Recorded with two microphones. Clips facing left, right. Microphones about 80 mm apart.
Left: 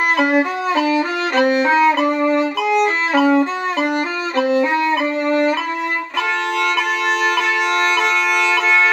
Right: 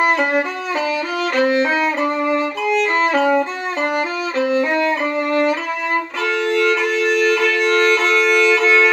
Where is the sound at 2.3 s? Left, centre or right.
Centre.